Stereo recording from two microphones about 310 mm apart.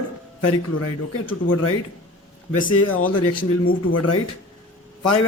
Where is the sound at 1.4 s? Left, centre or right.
Left.